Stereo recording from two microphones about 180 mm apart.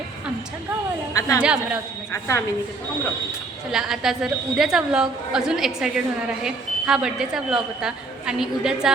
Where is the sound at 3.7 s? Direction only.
5° right (ahead or behind).